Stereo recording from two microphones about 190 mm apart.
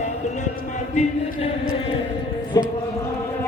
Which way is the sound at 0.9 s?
35° left (ahead or behind).